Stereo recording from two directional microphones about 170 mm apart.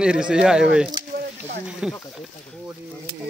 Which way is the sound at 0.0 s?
5° right (ahead or behind).